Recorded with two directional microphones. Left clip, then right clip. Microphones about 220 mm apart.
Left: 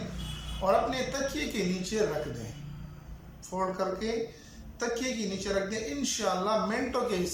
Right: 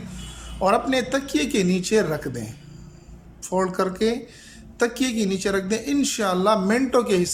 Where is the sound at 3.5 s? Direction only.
45° right (ahead or behind).